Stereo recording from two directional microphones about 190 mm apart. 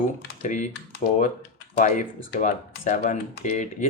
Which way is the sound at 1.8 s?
40° left (ahead or behind).